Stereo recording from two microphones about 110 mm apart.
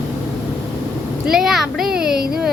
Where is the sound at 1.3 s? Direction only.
5° right (ahead or behind).